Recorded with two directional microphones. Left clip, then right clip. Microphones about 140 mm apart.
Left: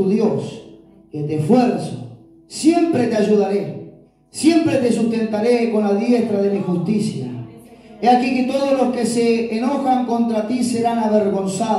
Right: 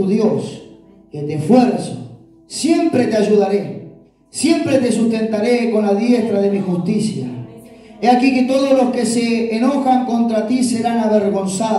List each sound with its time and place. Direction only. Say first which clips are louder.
0.1 s a man's voice: right 2 dB; 30° left (ahead or behind)